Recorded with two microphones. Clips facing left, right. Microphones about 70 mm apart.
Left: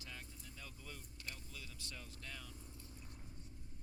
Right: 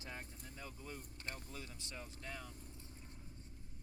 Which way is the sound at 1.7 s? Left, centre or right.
Right.